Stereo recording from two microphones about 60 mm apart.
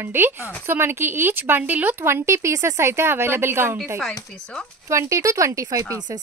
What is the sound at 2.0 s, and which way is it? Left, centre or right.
A woman's voice, right.